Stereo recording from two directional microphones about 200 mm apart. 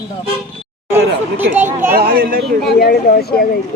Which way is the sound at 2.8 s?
50° left (ahead or behind).